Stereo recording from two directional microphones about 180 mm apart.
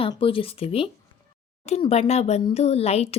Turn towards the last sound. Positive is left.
turn(degrees=35)  # may be behind; listen again after turning